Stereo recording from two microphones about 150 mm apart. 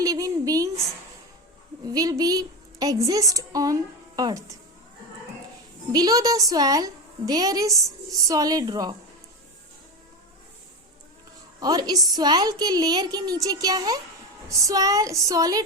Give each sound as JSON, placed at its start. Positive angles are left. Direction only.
{"t": 0.0, "sound": "a sound", "side_deg": -25}
{"t": 1.9, "sound": "a woman's voice", "side_deg": -25}
{"t": 5.9, "sound": "a woman's voice", "side_deg": -25}
{"t": 11.6, "sound": "a woman's voice", "side_deg": -25}